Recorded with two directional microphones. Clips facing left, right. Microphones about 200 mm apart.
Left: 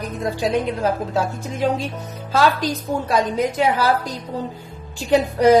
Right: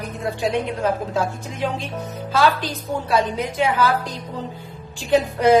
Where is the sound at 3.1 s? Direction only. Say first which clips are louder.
Left 1 dB; 40° left (ahead or behind).